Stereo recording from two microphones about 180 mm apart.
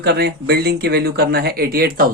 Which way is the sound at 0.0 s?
65° right (ahead or behind).